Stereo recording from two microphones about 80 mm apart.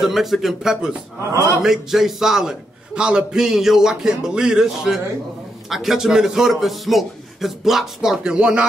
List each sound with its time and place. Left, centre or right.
0.0 s a man's voice: centre